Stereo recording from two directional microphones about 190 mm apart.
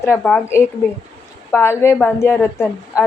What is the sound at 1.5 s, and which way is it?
Speech, 15° left (ahead or behind).